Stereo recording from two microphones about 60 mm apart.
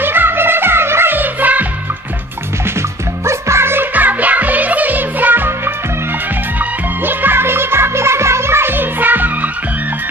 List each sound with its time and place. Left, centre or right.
0.0 s music: right
3.3 s music: right
3.9 s music: right
6.6 s music: right